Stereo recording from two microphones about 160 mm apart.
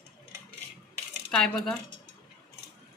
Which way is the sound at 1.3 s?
5° left (ahead or behind).